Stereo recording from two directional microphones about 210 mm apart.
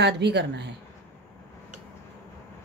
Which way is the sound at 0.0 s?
55° right (ahead or behind).